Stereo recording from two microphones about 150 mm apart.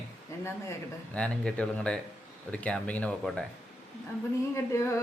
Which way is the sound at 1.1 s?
5° left (ahead or behind).